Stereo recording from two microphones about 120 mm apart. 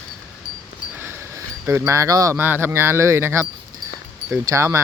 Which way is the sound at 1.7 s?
25° right (ahead or behind).